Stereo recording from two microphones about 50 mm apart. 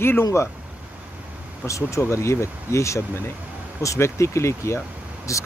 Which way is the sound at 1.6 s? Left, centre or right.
Left.